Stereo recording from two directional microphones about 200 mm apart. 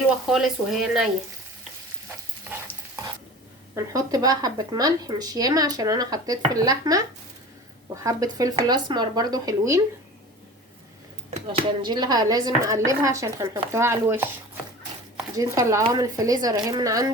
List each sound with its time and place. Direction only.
0.3 s speech: centre (ahead or behind)
2.5 s stir: 10° right (ahead or behind)
3.8 s a woman's voice: 15° right (ahead or behind)
8.0 s a woman's voice: 15° right (ahead or behind)
11.4 s speech: 25° right (ahead or behind)
15.4 s speech: 15° right (ahead or behind)